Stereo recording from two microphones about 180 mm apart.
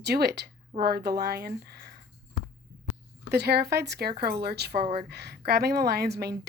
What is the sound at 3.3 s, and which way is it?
Speech, 65° right (ahead or behind).